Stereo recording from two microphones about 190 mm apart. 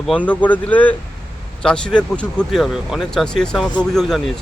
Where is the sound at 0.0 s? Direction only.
5° left (ahead or behind).